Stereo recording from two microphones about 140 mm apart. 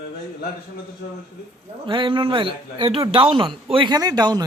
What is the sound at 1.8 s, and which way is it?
A man's voice, 40° right (ahead or behind).